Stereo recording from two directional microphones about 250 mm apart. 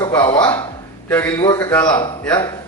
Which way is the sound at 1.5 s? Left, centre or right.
Centre.